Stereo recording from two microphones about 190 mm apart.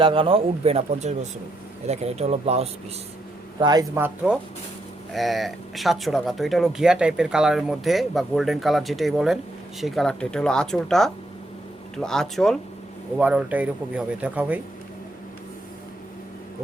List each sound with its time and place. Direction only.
0.0 s speech: 30° right (ahead or behind)
3.6 s speech: 20° right (ahead or behind)